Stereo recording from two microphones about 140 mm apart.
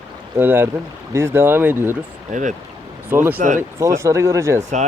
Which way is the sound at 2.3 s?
65° right (ahead or behind).